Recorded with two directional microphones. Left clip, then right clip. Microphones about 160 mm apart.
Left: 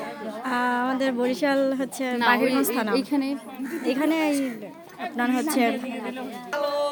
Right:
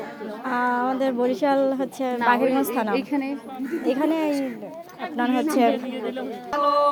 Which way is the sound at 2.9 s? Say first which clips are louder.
Even; 35° left (ahead or behind).